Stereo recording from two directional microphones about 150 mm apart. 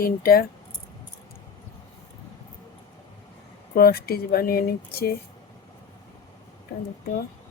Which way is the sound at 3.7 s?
85° left.